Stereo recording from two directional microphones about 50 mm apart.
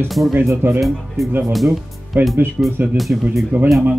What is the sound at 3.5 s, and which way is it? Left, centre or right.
Speech, right.